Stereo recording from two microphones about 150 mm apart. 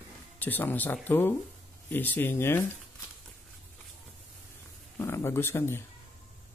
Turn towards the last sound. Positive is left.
turn(degrees=15)  # may be behind; listen again after turning